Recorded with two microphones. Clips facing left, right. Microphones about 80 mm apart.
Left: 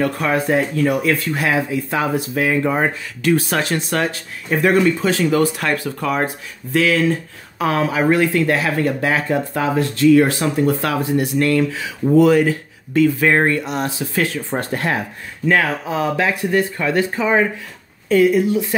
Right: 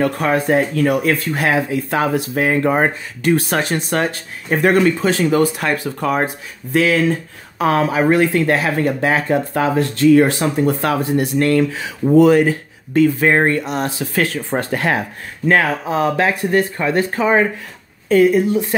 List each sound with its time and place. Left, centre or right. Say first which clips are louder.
0.0 s speech: right 2 dB; right
2.3 s speech: right 2 dB; right
5.6 s speech: right 1 dB; right
5.9 s speech: right 2 dB; right
7.5 s speech: right 3 dB; right
9.5 s speech: right 2 dB; right
13.5 s speech: right 1 dB; right
14.7 s speech: right 3 dB; right
15.4 s speech: right 2 dB; right
16.7 s speech: right 1 dB; right
17.1 s speech: right 2 dB; right
18.0 s speech: right 1 dB; right